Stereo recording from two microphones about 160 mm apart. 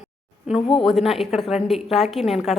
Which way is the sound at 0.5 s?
35° left (ahead or behind).